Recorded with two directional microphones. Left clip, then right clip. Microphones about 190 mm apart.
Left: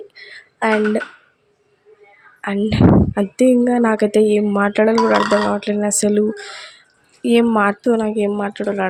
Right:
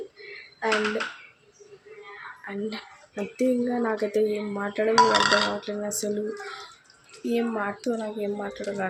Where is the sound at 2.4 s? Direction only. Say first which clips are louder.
Left 17 dB; 50° left (ahead or behind).